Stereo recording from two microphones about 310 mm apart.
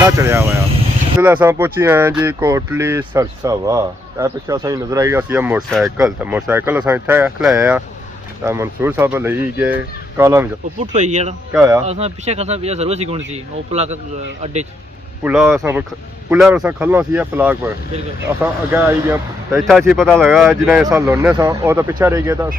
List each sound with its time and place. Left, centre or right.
0.0 s speech: centre
10.8 s speech: right
11.5 s speech: centre
11.9 s speech: right
15.2 s speech: centre
18.7 s speech: centre